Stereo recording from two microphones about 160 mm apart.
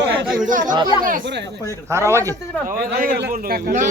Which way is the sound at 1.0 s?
75° right (ahead or behind).